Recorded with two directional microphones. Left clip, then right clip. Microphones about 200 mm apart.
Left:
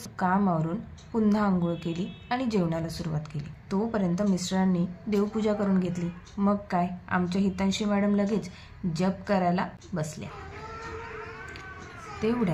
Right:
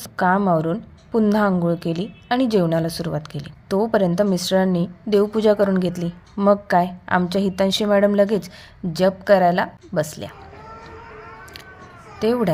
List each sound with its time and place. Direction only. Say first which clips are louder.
0.0 s a woman's voice: right 8 dB; 40° right (ahead or behind)
12.2 s a woman's voice: right 9 dB; 50° right (ahead or behind)